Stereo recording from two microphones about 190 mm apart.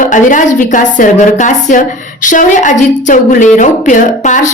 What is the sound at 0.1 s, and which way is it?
A woman's voice, 40° left (ahead or behind).